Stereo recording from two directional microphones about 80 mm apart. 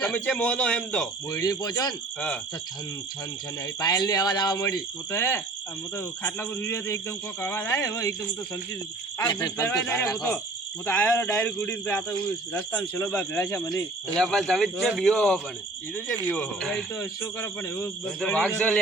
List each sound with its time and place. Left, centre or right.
0.0 s a man's voice: centre
1.3 s speech: left
3.8 s speech: left
5.1 s a man's voice: left
7.8 s a man's voice: left
9.1 s speech: left
10.8 s a man's voice: left
13.1 s a man's voice: centre
14.2 s a man's voice: centre
17.0 s a man's voice: left
18.3 s a man's voice: centre